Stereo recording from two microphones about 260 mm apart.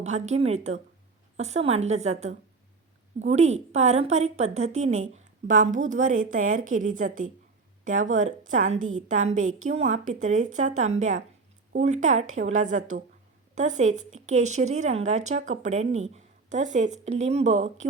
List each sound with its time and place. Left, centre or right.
0.0 s a woman's voice: right
8.8 s a woman's voice: right
9.6 s a woman's voice: right